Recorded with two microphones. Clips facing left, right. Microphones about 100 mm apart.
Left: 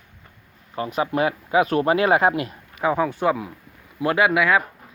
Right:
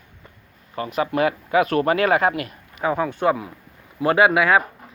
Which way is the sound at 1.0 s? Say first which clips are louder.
Right 2 dB; 10° left (ahead or behind).